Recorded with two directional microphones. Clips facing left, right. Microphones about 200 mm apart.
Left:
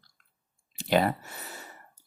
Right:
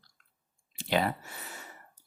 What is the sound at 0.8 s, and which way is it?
Speech, 40° left (ahead or behind).